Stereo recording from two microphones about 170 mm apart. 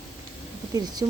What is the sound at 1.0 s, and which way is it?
Speech, 25° right (ahead or behind).